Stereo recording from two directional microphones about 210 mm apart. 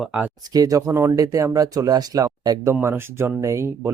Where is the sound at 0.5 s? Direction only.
15° right (ahead or behind).